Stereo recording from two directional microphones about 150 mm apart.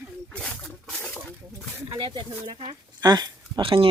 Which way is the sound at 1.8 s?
35° right (ahead or behind).